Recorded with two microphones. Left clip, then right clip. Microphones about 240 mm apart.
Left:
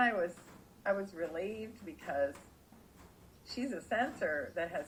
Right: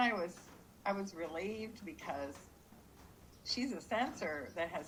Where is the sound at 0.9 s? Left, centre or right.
Right.